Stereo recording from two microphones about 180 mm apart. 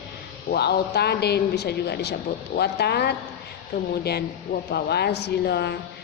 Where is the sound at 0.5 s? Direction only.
65° left (ahead or behind).